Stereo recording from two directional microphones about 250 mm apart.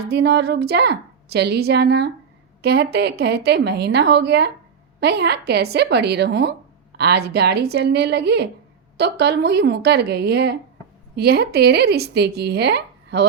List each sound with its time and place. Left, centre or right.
0.0 s speech: right